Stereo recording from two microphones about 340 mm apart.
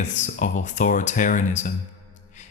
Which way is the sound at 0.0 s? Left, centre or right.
Left.